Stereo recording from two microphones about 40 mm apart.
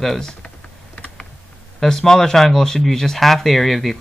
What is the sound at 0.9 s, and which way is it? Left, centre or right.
Computer keyboard, left.